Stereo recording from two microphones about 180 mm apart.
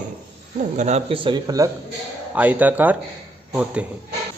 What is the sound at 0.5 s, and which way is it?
Speech, 40° right (ahead or behind).